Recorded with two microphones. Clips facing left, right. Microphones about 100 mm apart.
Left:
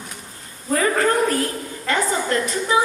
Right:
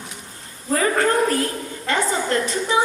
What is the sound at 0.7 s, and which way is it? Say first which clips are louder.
A woman's voice: even; 30° right (ahead or behind).